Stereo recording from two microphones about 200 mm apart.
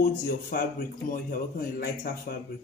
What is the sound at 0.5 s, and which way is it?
Speech, 45° left (ahead or behind).